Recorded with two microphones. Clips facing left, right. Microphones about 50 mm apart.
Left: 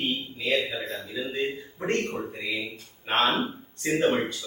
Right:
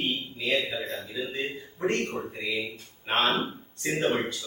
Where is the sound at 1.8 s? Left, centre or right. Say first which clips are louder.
Right 1 dB; centre.